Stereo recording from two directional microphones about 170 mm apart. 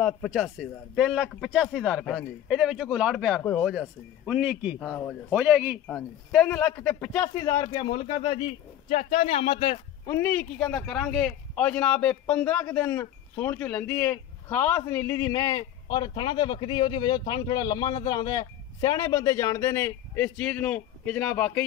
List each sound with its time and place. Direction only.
0.0 s speech: centre (ahead or behind)
5.9 s a man's voice: 10° left (ahead or behind)
7.3 s speech: 20° left (ahead or behind)
10.0 s a man's voice: 15° left (ahead or behind)